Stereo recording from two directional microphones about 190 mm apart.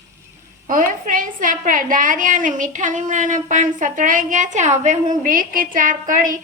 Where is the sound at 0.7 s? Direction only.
45° right (ahead or behind).